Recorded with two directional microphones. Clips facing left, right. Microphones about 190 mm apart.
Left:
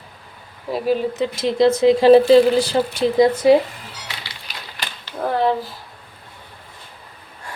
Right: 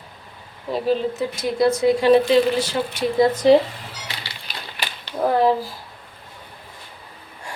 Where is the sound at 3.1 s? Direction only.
10° left (ahead or behind).